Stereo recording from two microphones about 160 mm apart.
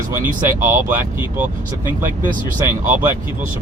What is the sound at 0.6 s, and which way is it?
Speech, 15° right (ahead or behind).